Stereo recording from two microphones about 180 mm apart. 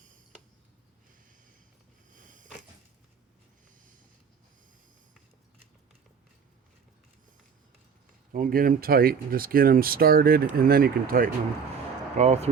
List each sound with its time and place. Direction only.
2.1 s a sound: 45° right (ahead or behind)
8.3 s speech: 50° right (ahead or behind)
12.1 s speech: 40° right (ahead or behind)